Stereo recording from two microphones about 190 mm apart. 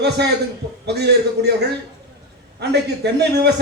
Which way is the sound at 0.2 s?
60° right (ahead or behind).